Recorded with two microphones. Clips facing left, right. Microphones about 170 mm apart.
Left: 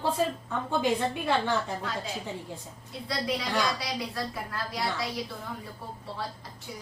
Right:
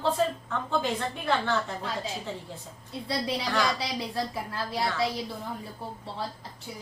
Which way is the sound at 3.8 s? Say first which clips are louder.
Right 2 dB; 25° right (ahead or behind).